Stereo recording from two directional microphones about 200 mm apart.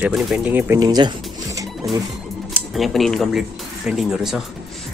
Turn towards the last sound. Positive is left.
turn(degrees=0)  # may be behind; listen again after turning